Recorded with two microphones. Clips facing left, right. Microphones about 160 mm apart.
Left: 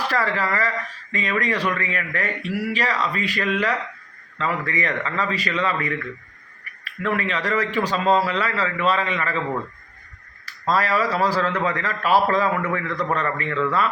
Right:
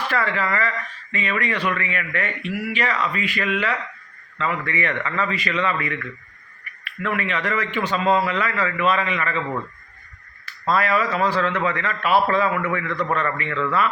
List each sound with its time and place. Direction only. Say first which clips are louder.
0.1 s a man's voice: right 2 dB; 35° left (ahead or behind)
10.4 s a man's voice: right 1 dB; 35° left (ahead or behind)